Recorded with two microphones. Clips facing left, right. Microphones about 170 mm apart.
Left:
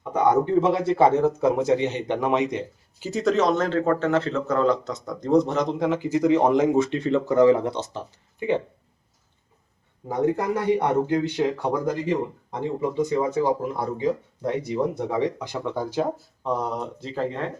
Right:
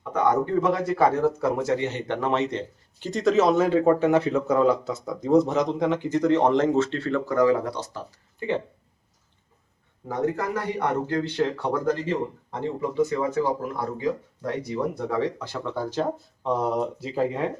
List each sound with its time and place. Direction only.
0.0 s a sound: 15° left (ahead or behind)
0.5 s speech: 25° left (ahead or behind)
10.1 s speech: 15° left (ahead or behind); by 17.5 s 10° right (ahead or behind)